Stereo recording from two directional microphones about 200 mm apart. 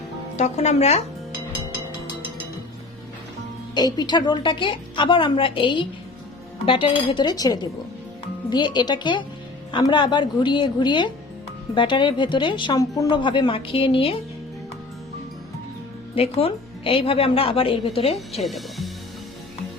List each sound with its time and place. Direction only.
0.3 s speech: 35° left (ahead or behind)
3.8 s a woman's voice: 20° left (ahead or behind)
16.1 s a woman's voice: 30° left (ahead or behind)
18.3 s speech: centre (ahead or behind)